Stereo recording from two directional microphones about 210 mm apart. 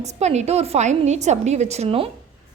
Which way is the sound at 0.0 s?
30° right (ahead or behind).